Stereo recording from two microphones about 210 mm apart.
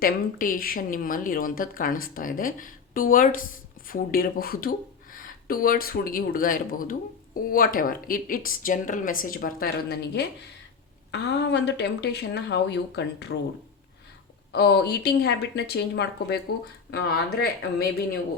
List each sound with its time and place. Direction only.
0.0 s speech: 40° left (ahead or behind)
14.5 s speech: 50° left (ahead or behind)